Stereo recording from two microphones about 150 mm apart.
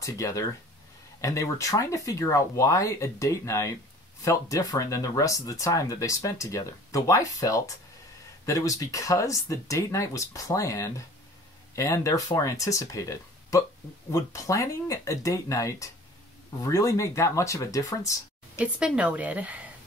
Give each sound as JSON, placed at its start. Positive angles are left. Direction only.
{"t": 0.0, "sound": "speech", "side_deg": 20}
{"t": 18.6, "sound": "speech", "side_deg": -5}